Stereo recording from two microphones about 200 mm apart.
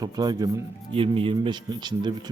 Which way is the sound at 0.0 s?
20° right (ahead or behind).